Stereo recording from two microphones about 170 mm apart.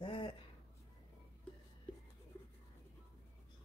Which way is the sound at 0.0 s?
30° left (ahead or behind).